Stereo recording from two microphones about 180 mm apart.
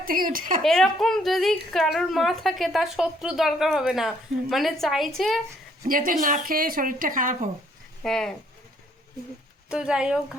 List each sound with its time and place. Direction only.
0.0 s speech: 50° right (ahead or behind)
0.6 s a woman's voice: centre (ahead or behind)
5.8 s speech: 50° right (ahead or behind)
8.0 s a woman's voice: 5° left (ahead or behind)
9.6 s a woman's voice: 5° right (ahead or behind)